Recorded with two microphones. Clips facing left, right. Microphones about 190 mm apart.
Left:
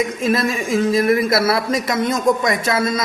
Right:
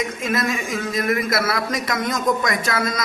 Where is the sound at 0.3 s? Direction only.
30° left (ahead or behind).